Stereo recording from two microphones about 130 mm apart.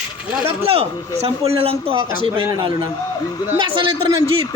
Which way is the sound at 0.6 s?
45° right (ahead or behind).